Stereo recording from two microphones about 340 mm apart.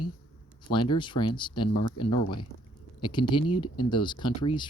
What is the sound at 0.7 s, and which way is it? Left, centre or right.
Speech, centre.